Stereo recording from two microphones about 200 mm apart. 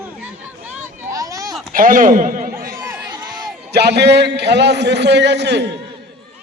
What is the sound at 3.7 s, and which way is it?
A man's voice, 55° right (ahead or behind).